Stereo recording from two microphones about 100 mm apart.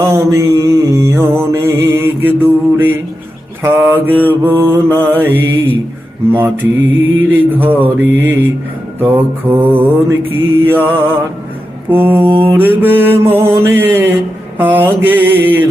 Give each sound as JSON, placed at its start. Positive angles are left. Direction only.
{"t": 0.0, "sound": "mantra", "side_deg": -25}
{"t": 7.0, "sound": "mantra", "side_deg": -20}